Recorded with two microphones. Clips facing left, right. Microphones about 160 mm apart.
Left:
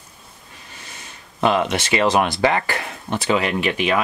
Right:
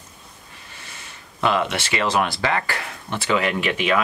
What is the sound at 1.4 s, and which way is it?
Speech, 20° left (ahead or behind).